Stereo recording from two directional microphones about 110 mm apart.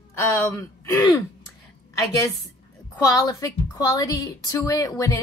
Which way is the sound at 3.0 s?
30° left (ahead or behind).